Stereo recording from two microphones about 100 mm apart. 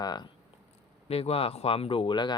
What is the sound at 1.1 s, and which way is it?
Speech, 80° left.